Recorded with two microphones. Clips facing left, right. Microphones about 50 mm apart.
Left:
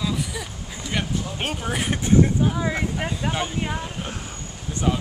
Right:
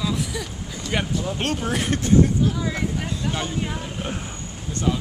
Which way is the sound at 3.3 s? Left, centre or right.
Centre.